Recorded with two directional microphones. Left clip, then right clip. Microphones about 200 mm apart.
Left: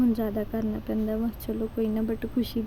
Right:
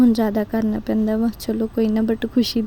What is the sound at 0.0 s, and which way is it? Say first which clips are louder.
Speech: right 9 dB; 45° right (ahead or behind).